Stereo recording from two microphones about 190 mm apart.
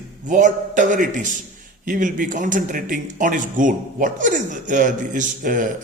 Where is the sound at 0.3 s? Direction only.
40° right (ahead or behind).